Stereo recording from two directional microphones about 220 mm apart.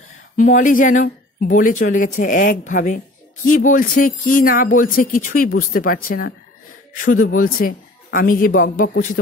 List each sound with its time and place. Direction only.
0.4 s a woman's voice: 35° left (ahead or behind)